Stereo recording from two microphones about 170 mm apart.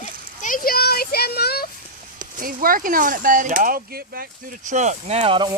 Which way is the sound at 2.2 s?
55° right (ahead or behind).